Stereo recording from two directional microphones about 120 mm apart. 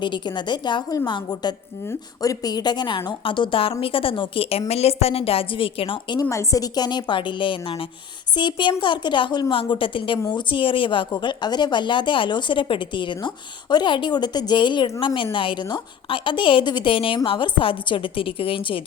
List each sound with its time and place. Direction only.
0.0 s a woman's voice: 40° left (ahead or behind)
6.2 s a woman's voice: 25° left (ahead or behind); by 18.8 s 50° left (ahead or behind)